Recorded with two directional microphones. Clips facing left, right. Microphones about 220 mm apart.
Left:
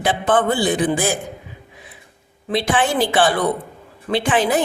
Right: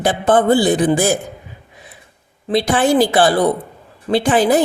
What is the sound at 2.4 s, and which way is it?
Speech, 40° right (ahead or behind).